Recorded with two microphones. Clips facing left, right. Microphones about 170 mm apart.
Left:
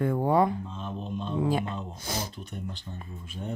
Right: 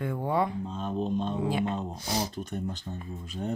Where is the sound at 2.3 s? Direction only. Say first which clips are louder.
Right 5 dB; 45° right (ahead or behind).